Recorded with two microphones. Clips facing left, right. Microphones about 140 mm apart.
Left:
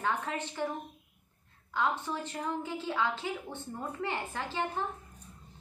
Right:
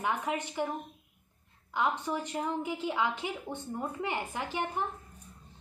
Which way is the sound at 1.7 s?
15° right (ahead or behind).